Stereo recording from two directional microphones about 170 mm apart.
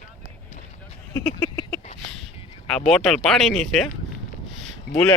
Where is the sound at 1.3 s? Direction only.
20° left (ahead or behind).